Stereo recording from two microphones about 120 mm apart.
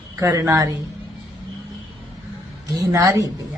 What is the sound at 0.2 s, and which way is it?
Speech, 25° right (ahead or behind).